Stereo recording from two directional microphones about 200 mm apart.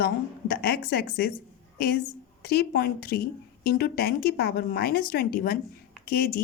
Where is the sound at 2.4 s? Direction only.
50° left (ahead or behind).